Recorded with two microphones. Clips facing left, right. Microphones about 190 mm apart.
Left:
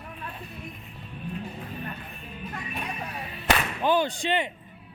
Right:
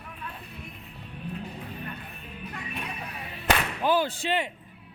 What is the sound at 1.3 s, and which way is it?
Vehicle, 45° left (ahead or behind).